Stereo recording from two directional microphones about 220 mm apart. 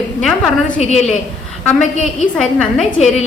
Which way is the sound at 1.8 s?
35° left (ahead or behind).